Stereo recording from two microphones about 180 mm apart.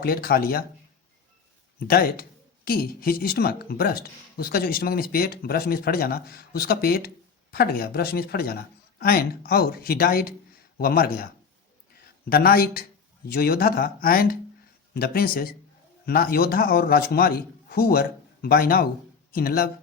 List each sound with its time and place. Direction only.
0.0 s speech: 55° left (ahead or behind)
1.9 s speech: 55° left (ahead or behind)